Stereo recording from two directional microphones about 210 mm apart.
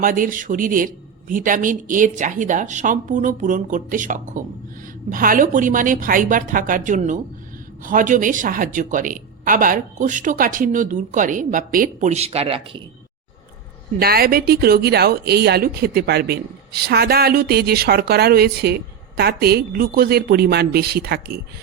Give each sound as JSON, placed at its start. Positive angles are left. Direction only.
{"t": 0.0, "sound": "a woman's voice", "side_deg": -40}
{"t": 14.0, "sound": "a woman's voice", "side_deg": -45}